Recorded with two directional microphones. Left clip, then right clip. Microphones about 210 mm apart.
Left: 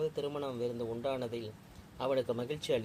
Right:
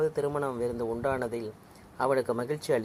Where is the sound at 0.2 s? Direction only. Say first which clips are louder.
Right 7 dB; 25° right (ahead or behind).